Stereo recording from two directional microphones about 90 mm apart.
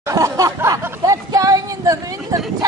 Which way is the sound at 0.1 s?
40° right (ahead or behind).